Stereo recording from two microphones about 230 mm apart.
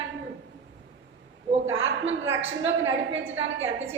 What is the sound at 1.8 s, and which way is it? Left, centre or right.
A woman's voice, right.